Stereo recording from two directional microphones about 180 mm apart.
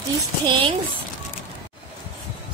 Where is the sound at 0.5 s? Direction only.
30° right (ahead or behind).